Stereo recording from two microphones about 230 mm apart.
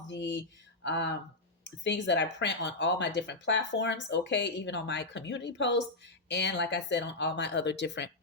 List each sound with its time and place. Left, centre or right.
0.1 s speech: left